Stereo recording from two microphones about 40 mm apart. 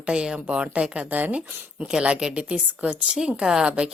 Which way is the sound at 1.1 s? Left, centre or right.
Right.